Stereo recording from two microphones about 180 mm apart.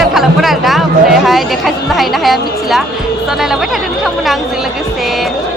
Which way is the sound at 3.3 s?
Centre (ahead or behind).